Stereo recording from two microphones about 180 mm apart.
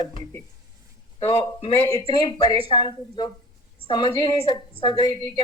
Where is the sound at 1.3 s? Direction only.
25° left (ahead or behind).